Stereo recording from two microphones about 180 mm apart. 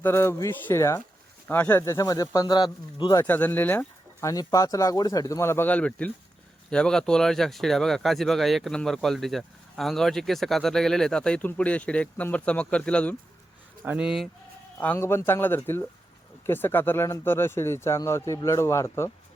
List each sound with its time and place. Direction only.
0.0 s speech: 15° left (ahead or behind)
3.2 s speech: 10° left (ahead or behind)
13.8 s speech: 5° right (ahead or behind)
14.8 s speech: 10° left (ahead or behind)